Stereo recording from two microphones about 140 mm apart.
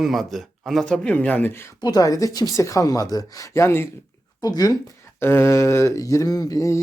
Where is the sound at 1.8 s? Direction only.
30° left (ahead or behind).